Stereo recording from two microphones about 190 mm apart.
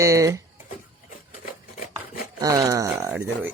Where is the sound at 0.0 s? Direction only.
15° right (ahead or behind).